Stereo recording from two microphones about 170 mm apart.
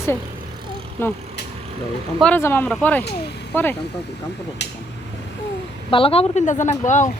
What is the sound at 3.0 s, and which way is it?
Speech, 75° left (ahead or behind).